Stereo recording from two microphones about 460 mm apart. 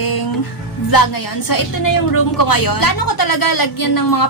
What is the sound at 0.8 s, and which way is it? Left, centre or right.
A woman's voice, left.